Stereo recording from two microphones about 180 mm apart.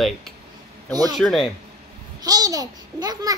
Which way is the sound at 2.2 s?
20° right (ahead or behind).